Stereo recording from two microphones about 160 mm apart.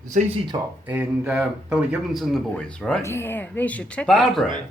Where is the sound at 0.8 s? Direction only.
10° right (ahead or behind).